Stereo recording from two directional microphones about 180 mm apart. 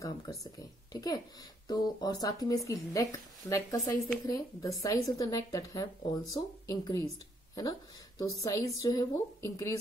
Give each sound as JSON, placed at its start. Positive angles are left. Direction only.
{"t": 0.0, "sound": "speech", "side_deg": 20}
{"t": 8.2, "sound": "a woman's voice", "side_deg": 20}